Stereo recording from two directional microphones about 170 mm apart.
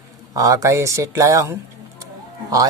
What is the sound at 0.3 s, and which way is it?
Speech, 20° right (ahead or behind).